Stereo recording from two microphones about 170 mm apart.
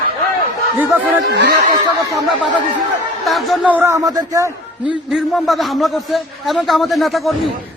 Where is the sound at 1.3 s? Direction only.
75° right (ahead or behind).